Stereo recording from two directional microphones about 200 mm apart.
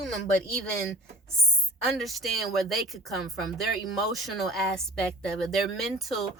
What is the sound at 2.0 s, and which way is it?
Speech, centre (ahead or behind).